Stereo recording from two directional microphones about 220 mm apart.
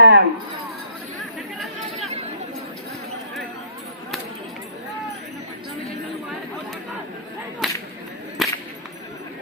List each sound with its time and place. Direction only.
0.0 s a sound: 55° right (ahead or behind)
1.5 s chatter: centre (ahead or behind)
2.0 s chatter: 30° right (ahead or behind)
7.6 s whip: centre (ahead or behind)